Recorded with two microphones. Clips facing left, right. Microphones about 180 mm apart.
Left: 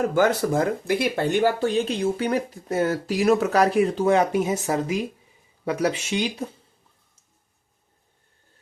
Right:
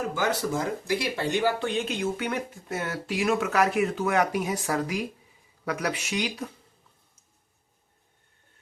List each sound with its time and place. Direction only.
0.1 s speech: 55° left (ahead or behind); by 6.5 s 25° left (ahead or behind)